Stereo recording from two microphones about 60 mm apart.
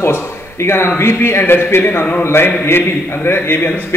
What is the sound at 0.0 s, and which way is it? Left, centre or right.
A man's voice, left.